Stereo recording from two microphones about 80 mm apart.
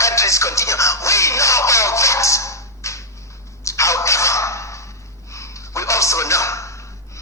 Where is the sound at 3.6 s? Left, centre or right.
Left.